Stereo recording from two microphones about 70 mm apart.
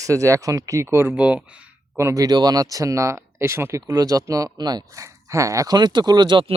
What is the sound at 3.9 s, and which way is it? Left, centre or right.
Speech, right.